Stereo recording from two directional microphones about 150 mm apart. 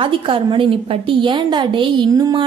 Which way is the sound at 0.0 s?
35° right (ahead or behind).